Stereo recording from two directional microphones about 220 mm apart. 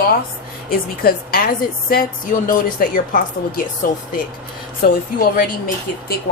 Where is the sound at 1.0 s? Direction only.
40° left (ahead or behind).